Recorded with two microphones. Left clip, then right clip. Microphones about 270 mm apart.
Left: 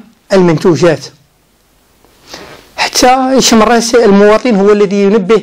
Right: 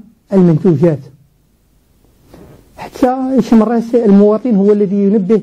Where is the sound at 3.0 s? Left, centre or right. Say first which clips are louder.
Left 6 dB; centre.